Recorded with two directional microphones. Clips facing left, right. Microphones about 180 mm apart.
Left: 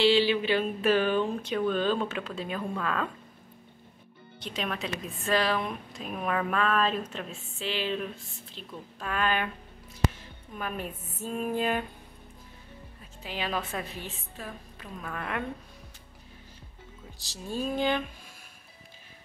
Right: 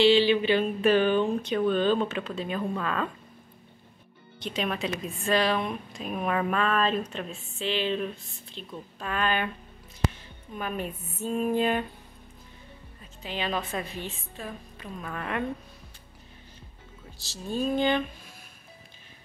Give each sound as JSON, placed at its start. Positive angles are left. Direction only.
{"t": 0.0, "sound": "a woman's voice", "side_deg": 5}
{"t": 4.8, "sound": "a woman's voice", "side_deg": 0}
{"t": 10.6, "sound": "a woman's voice", "side_deg": 5}
{"t": 13.2, "sound": "a woman's voice", "side_deg": 5}
{"t": 17.2, "sound": "a woman's voice", "side_deg": 15}